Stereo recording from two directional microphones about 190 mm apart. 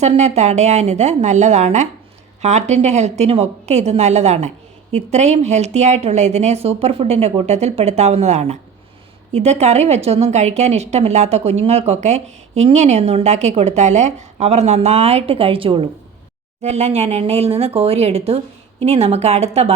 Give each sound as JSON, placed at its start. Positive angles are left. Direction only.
{"t": 0.0, "sound": "speech", "side_deg": -35}